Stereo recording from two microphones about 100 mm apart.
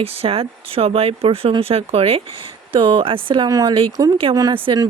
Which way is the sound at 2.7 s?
60° right (ahead or behind).